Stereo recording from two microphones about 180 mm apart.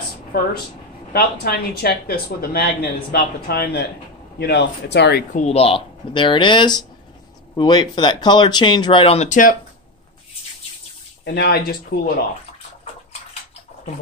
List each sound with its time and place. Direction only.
0.3 s speech: 60° left (ahead or behind)
5.3 s speech: 40° left (ahead or behind)
11.2 s speech: 60° left (ahead or behind)